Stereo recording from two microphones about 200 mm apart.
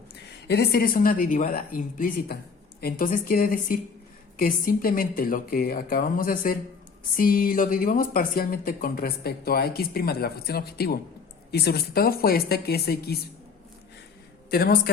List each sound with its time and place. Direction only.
0.1 s speech: 55° left (ahead or behind)
14.5 s speech: 50° left (ahead or behind)